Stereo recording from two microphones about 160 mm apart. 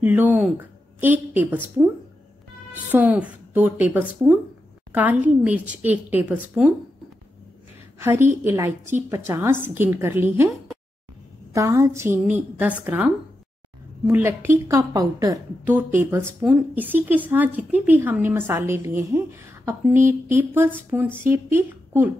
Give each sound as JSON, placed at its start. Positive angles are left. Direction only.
{"t": 0.0, "sound": "a woman's voice", "side_deg": -10}
{"t": 1.0, "sound": "a woman's voice", "side_deg": -10}
{"t": 8.0, "sound": "a woman's voice", "side_deg": -15}